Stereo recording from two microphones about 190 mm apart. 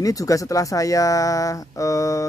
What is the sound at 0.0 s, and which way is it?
Speech, 20° left (ahead or behind).